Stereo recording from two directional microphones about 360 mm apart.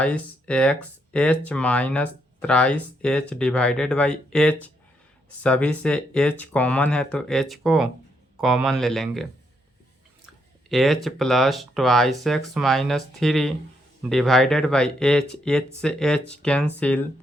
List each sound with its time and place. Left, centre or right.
0.0 s speech: centre
10.7 s speech: centre